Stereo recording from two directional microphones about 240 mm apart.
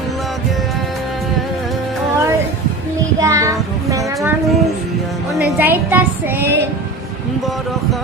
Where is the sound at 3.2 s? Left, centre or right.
Centre.